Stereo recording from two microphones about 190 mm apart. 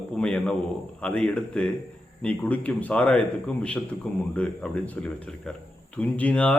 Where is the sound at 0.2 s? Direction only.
5° left (ahead or behind).